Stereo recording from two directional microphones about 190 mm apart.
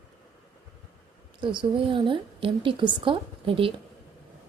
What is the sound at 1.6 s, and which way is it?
A woman's voice, 25° right (ahead or behind).